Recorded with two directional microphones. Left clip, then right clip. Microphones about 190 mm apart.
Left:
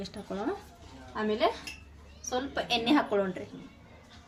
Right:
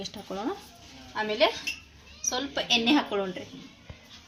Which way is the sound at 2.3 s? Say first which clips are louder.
Right 4 dB; 35° right (ahead or behind).